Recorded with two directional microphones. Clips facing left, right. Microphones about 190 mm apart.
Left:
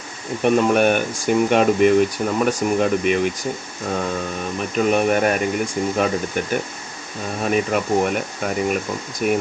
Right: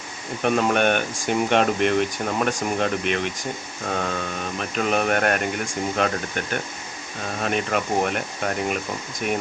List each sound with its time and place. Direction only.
0.4 s speech: 5° left (ahead or behind)
4.4 s speech: 5° left (ahead or behind)